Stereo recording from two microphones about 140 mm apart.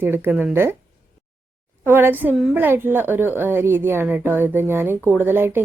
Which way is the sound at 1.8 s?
15° right (ahead or behind).